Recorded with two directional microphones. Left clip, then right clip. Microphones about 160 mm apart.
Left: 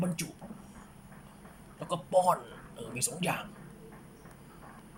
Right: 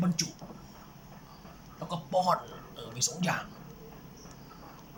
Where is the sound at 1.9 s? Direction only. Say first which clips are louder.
Left 1 dB; 15° left (ahead or behind).